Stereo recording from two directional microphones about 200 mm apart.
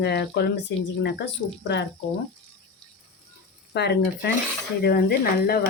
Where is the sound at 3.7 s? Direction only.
60° left (ahead or behind).